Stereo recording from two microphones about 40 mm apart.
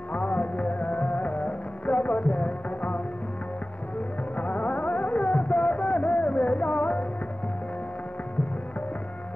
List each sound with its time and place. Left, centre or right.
0.1 s music: left
4.4 s music: left